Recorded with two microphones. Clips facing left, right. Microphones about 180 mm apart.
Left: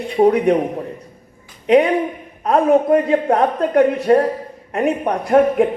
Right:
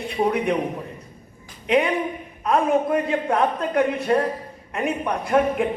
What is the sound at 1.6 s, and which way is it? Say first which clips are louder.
A man's voice: left 7 dB; 45° left (ahead or behind).